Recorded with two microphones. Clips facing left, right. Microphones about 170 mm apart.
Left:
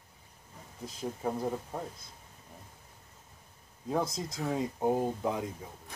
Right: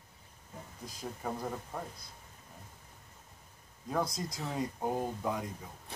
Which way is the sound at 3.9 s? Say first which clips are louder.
Left 2 dB; 25° left (ahead or behind).